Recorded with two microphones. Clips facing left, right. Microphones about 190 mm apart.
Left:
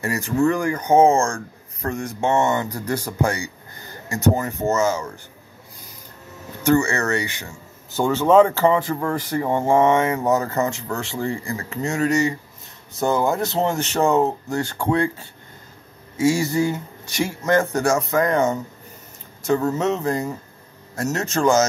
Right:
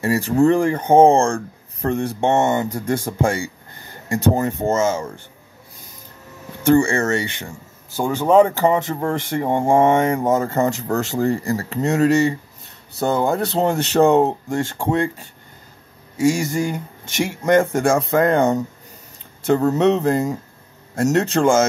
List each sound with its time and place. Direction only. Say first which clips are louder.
0.0 s speech: right 4 dB; 30° right (ahead or behind)
6.7 s speech: right 3 dB; 30° right (ahead or behind)
7.9 s speech: even; 15° right (ahead or behind)
9.8 s speech: right 2 dB; 50° right (ahead or behind)
10.3 s speech: right 2 dB; 25° right (ahead or behind)
14.2 s speech: right 2 dB; 25° right (ahead or behind)
16.2 s speech: right 1 dB; 45° right (ahead or behind)
16.4 s speech: left 1 dB; 15° right (ahead or behind)
17.5 s speech: right 3 dB; 25° right (ahead or behind)
19.4 s speech: right 4 dB; 35° right (ahead or behind)